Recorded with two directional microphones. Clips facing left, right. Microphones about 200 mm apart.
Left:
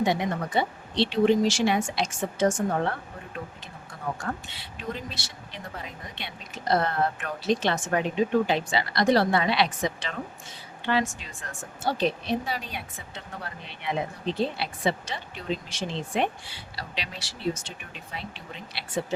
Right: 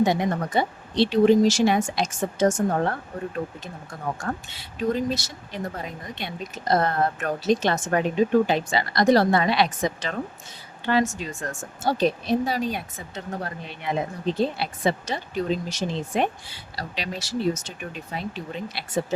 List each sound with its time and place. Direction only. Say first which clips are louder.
0.0 s speech: right 4 dB; 40° right (ahead or behind)
4.2 s speech: right 3 dB; 45° right (ahead or behind)